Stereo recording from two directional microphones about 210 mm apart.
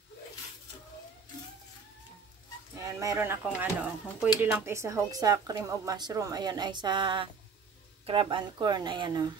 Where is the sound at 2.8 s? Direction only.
15° right (ahead or behind).